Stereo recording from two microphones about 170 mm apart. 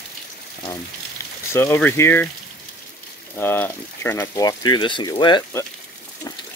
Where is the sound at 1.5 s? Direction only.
15° left (ahead or behind).